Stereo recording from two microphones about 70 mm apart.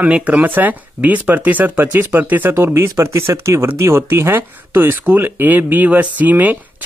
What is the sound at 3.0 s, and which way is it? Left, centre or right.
Speech, right.